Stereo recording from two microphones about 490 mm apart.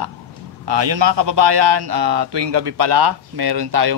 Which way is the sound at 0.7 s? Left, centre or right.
Right.